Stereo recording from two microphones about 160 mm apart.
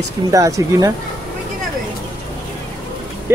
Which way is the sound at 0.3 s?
20° right (ahead or behind).